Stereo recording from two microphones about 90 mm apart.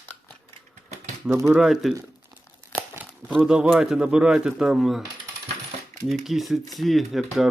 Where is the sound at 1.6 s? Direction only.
5° right (ahead or behind).